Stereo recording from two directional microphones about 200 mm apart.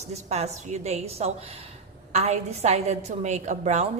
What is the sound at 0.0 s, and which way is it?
A woman's voice, 35° right (ahead or behind).